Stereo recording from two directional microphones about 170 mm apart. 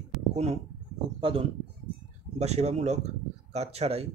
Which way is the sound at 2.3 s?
40° right (ahead or behind).